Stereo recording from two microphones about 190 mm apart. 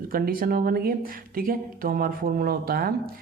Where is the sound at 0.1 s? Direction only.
50° right (ahead or behind).